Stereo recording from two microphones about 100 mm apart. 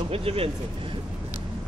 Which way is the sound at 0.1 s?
75° right (ahead or behind).